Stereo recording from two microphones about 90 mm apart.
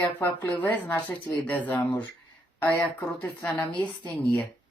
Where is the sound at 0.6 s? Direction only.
20° left (ahead or behind).